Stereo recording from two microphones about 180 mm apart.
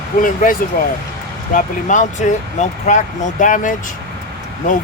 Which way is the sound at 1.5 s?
45° left (ahead or behind).